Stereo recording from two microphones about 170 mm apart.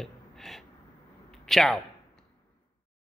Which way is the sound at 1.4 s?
Centre (ahead or behind).